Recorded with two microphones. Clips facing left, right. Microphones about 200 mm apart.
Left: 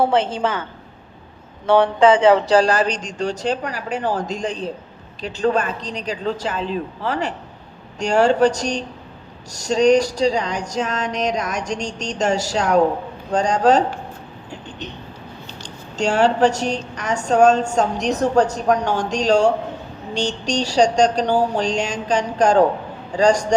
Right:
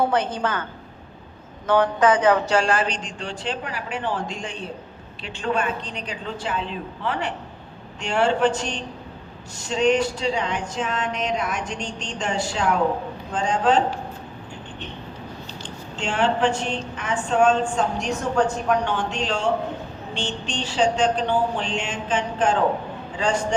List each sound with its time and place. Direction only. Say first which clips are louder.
0.0 s a woman's voice: left 4 dB; 25° left (ahead or behind)
1.6 s a woman's voice: left 4 dB; 30° left (ahead or behind)
15.6 s a woman's voice: left 9 dB; 40° left (ahead or behind)